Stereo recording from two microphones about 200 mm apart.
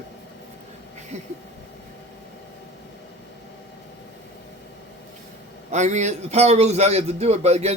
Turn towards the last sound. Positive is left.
turn(degrees=-30)  # may be behind; listen again after turning